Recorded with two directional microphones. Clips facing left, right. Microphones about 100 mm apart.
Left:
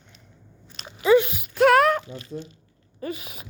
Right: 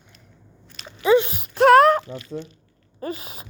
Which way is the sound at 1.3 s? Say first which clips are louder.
Right 4 dB; 35° right (ahead or behind).